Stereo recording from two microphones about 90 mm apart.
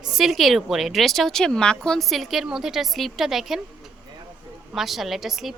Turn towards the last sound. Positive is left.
turn(degrees=-5)  # may be behind; listen again after turning